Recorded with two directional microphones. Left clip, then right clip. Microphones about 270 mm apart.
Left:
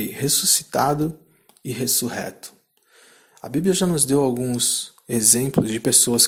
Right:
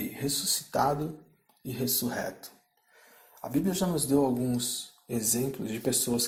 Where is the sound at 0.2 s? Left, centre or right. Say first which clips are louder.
Left 10 dB; left.